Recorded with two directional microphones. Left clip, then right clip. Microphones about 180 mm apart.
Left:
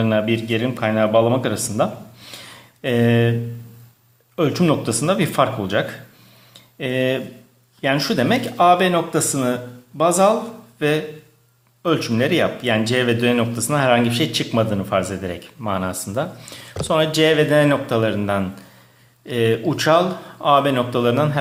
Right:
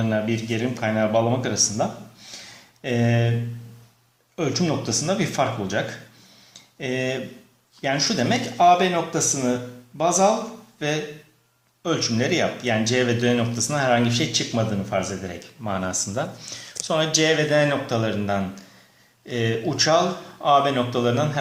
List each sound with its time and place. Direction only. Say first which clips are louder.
0.0 s speech: left 5 dB; 30° left (ahead or behind)
4.4 s speech: left 6 dB; 35° left (ahead or behind)